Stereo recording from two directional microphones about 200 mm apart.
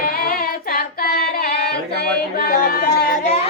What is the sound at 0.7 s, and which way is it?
Carnatic music, 50° left (ahead or behind).